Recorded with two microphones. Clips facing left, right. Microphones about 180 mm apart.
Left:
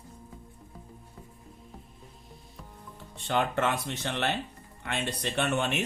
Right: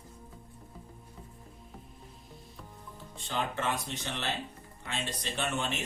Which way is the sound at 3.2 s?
65° left (ahead or behind).